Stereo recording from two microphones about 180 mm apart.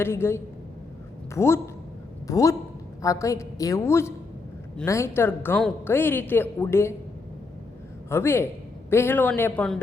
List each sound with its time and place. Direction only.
0.0 s a woman's voice: 15° left (ahead or behind)
8.1 s a woman's voice: 15° left (ahead or behind)